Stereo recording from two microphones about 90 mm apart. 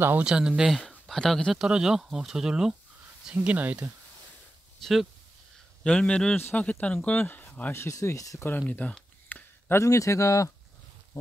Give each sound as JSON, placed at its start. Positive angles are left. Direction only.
{"t": 0.2, "sound": "speech", "side_deg": -10}
{"t": 4.8, "sound": "speech", "side_deg": 5}
{"t": 7.7, "sound": "a man's voice", "side_deg": 30}
{"t": 8.4, "sound": "speech", "side_deg": 20}
{"t": 9.3, "sound": "a sound", "side_deg": 20}
{"t": 9.8, "sound": "a man's voice", "side_deg": 35}